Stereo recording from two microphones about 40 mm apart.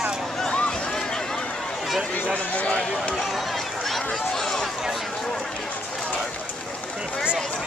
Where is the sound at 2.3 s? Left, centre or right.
Left.